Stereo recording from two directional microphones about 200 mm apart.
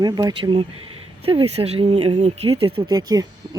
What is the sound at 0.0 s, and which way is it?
Speech, 20° right (ahead or behind).